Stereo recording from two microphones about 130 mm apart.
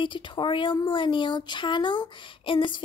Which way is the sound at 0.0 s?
40° left (ahead or behind).